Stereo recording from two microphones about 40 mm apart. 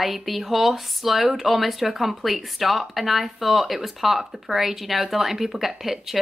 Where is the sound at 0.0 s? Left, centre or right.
Centre.